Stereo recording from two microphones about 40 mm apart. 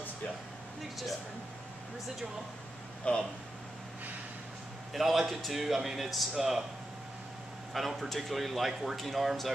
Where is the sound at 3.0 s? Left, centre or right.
Left.